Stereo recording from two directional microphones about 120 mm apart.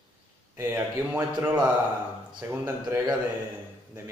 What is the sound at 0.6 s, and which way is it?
A man's voice, 15° right (ahead or behind).